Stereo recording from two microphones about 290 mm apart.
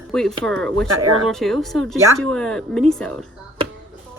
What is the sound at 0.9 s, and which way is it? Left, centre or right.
Speech, right.